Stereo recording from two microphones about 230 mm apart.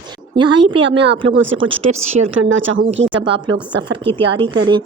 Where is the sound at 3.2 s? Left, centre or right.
Right.